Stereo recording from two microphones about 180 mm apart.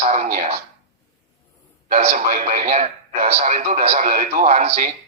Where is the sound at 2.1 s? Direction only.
50° right (ahead or behind).